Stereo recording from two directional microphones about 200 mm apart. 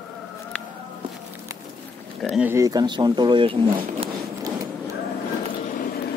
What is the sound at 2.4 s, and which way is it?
Speech, 10° right (ahead or behind).